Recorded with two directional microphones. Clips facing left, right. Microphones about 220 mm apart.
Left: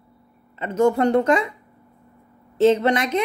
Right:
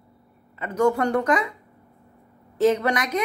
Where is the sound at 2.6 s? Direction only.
25° left (ahead or behind).